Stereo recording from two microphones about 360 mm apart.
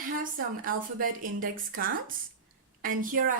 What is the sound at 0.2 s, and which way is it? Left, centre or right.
Speech, right.